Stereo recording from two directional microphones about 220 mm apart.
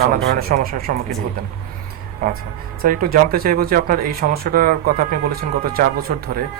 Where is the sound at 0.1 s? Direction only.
40° right (ahead or behind).